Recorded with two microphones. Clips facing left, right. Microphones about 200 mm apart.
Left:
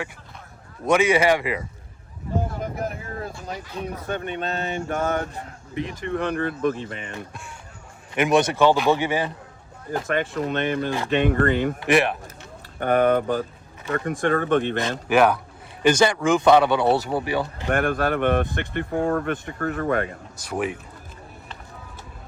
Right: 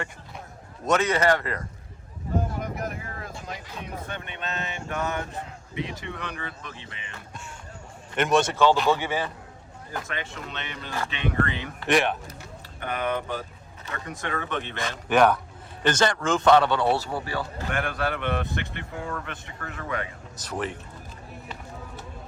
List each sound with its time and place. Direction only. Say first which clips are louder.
0.9 s speech: left 4 dB; 10° left (ahead or behind)
2.7 s a sound: left 4 dB; 35° left (ahead or behind)
4.0 s speech: left 8 dB; 40° left (ahead or behind)
8.1 s speech: left 3 dB; 10° left (ahead or behind)
10.1 s speech: left 11 dB; 50° left (ahead or behind)
11.8 s speech: even; 5° left (ahead or behind)
12.8 s speech: left 10 dB; 50° left (ahead or behind)
15.1 s speech: left 1 dB; 5° left (ahead or behind)
17.7 s speech: left 7 dB; 50° left (ahead or behind)
20.3 s speech: left 4 dB; 10° left (ahead or behind)